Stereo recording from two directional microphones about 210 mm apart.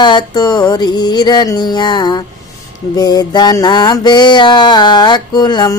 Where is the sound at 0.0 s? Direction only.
20° left (ahead or behind).